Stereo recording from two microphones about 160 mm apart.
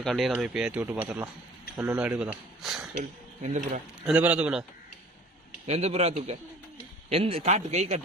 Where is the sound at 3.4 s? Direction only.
45° right (ahead or behind).